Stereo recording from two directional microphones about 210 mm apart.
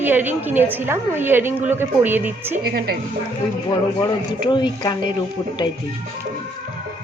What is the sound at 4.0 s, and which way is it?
Speech, 20° left (ahead or behind).